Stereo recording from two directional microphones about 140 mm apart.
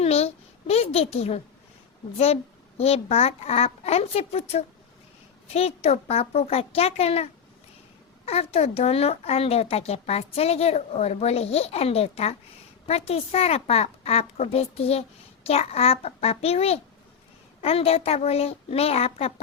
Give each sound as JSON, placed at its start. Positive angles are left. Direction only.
{"t": 0.0, "sound": "a child's voice", "side_deg": 50}